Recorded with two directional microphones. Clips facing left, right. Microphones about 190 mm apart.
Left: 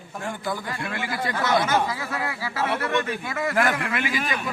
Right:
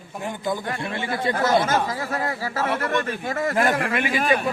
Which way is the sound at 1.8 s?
45° right (ahead or behind).